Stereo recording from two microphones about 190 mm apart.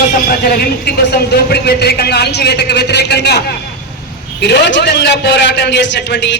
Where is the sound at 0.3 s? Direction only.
50° left (ahead or behind).